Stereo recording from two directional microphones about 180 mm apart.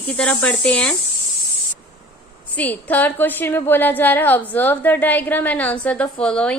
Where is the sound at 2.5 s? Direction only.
10° left (ahead or behind).